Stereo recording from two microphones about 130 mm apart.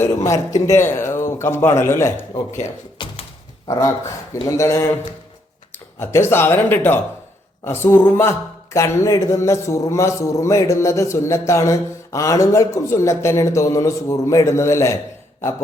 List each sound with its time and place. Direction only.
0.3 s speech: 20° left (ahead or behind)
3.0 s thunk: 35° left (ahead or behind)
3.7 s speech: 25° left (ahead or behind)